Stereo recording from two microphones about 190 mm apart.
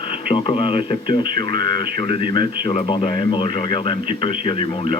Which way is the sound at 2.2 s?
50° right (ahead or behind).